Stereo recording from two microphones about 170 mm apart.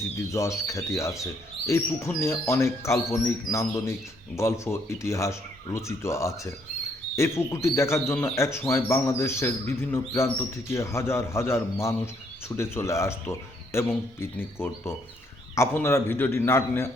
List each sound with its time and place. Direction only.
0.3 s speech: 15° left (ahead or behind)